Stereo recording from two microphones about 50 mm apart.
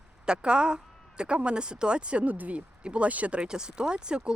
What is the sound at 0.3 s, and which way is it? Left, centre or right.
A woman's voice, centre.